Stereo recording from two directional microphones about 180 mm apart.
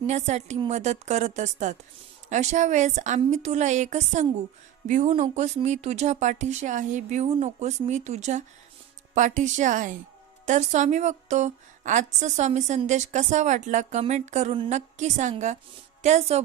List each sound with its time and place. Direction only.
0.1 s a woman's voice: 40° right (ahead or behind)